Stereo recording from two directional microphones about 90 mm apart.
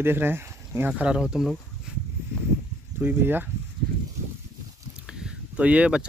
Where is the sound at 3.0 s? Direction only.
20° right (ahead or behind).